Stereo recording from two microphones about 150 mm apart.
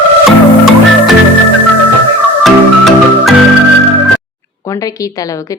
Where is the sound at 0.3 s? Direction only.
Centre (ahead or behind).